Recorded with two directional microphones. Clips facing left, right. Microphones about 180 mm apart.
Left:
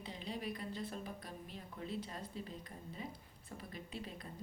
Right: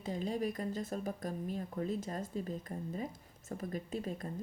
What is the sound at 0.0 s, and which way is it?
Speech, 45° right (ahead or behind).